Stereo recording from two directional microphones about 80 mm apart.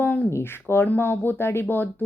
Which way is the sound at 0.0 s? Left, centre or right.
Left.